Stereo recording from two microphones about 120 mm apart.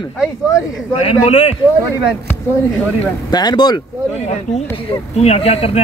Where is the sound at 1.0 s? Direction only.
65° left (ahead or behind).